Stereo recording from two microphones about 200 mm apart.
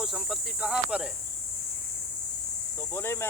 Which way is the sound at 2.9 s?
10° left (ahead or behind).